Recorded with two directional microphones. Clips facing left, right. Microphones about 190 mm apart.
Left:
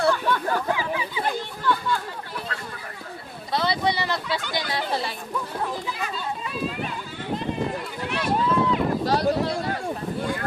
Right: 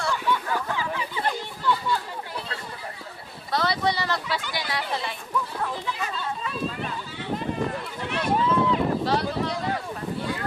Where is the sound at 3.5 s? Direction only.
20° left (ahead or behind).